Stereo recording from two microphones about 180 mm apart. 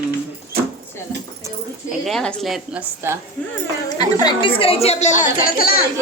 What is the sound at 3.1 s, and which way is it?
Music, 15° right (ahead or behind).